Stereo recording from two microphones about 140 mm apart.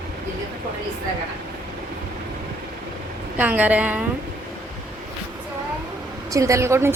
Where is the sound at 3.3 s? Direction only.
10° right (ahead or behind).